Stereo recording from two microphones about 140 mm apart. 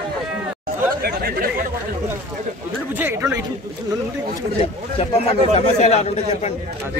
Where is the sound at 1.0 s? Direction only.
90° right.